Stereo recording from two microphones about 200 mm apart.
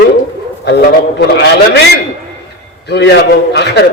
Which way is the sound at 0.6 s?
55° left (ahead or behind).